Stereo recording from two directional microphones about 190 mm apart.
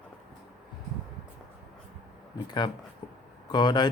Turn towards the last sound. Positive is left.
turn(degrees=25)  # may be behind; listen again after turning